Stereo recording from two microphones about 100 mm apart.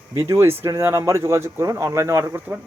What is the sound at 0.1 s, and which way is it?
Speech, 30° right (ahead or behind).